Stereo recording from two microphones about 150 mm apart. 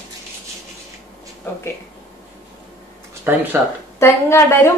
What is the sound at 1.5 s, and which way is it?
Speech, 15° left (ahead or behind).